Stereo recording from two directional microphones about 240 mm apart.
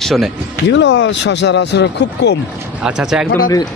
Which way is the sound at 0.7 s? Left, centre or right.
Left.